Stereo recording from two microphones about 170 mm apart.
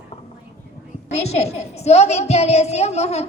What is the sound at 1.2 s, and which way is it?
A woman's voice, 40° left (ahead or behind).